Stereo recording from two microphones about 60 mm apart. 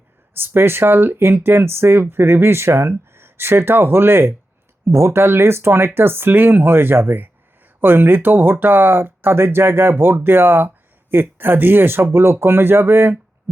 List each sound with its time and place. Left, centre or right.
0.3 s speech: right